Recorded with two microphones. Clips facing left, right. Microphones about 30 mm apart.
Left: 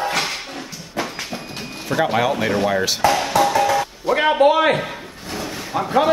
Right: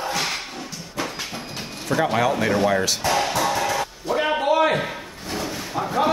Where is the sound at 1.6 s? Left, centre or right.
Centre.